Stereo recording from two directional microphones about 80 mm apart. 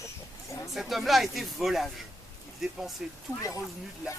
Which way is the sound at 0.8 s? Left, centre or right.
Centre.